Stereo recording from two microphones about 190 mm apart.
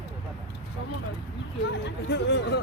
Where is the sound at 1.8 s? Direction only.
65° left (ahead or behind).